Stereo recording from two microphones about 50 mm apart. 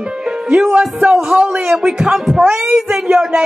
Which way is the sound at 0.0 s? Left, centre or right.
Centre.